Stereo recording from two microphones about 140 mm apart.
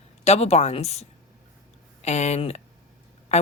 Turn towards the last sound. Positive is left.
turn(degrees=50)  # may be behind; listen again after turning